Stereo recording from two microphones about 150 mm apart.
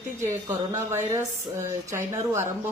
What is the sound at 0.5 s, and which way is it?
Speech, 15° right (ahead or behind).